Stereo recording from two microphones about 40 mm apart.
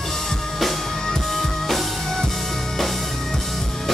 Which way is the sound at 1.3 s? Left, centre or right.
Centre.